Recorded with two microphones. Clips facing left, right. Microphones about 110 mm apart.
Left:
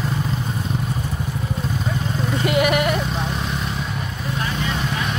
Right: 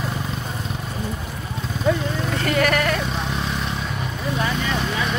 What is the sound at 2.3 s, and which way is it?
Vehicle, 15° left (ahead or behind).